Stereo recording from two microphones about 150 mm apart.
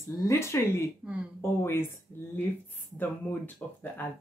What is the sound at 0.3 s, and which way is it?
A woman's voice, 20° left (ahead or behind).